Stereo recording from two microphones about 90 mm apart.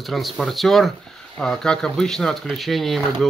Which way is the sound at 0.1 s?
Centre (ahead or behind).